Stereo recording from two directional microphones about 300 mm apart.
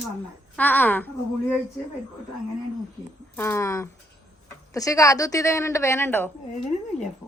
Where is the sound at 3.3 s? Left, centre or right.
Centre.